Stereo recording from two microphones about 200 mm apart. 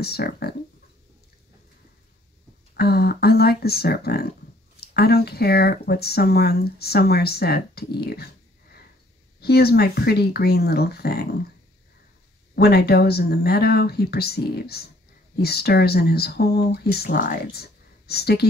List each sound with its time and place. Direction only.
0.0 s speech: 50° left (ahead or behind)
2.7 s speech: 50° left (ahead or behind)
9.4 s speech: 50° left (ahead or behind)
12.5 s speech: 55° left (ahead or behind)